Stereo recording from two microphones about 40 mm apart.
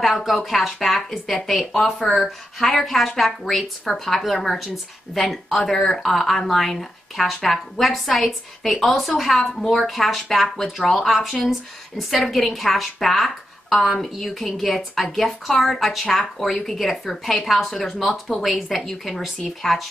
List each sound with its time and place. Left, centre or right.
0.0 s speech: centre
9.4 s a woman's voice: centre